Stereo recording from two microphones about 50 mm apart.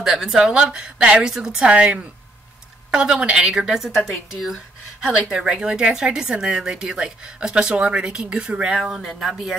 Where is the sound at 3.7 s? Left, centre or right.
Centre; by 8.8 s right.